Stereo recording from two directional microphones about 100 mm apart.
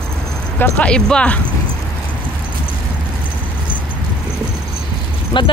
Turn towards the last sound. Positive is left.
turn(degrees=50)  # may be behind; listen again after turning